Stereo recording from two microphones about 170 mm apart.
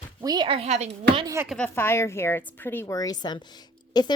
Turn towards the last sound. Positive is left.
turn(degrees=25)  # may be behind; listen again after turning